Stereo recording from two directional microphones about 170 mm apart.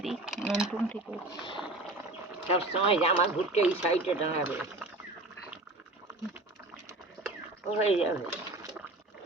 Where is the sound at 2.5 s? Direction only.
35° left (ahead or behind).